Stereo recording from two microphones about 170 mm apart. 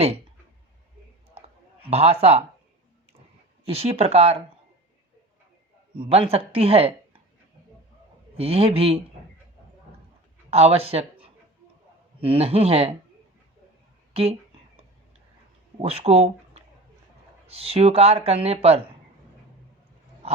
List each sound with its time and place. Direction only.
1.4 s a sound: 35° right (ahead or behind)
3.7 s speech: 35° right (ahead or behind)
6.1 s speech: 35° right (ahead or behind)
8.4 s speech: 35° right (ahead or behind)
10.5 s speech: 35° right (ahead or behind)
12.2 s speech: 35° right (ahead or behind)
15.8 s speech: 35° right (ahead or behind)